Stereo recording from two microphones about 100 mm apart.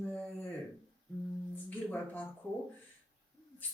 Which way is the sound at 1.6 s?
15° left (ahead or behind).